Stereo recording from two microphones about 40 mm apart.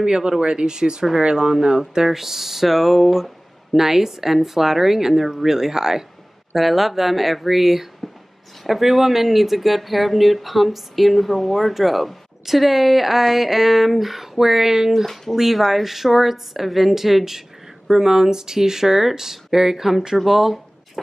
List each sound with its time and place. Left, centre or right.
0.0 s speech: centre